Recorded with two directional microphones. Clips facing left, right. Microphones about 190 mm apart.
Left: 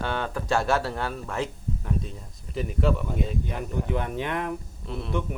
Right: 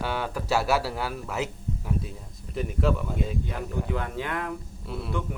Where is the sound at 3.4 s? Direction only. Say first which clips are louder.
Left 1 dB; 20° left (ahead or behind).